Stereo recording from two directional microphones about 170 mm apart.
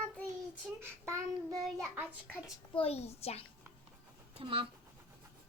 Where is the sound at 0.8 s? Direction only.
20° right (ahead or behind).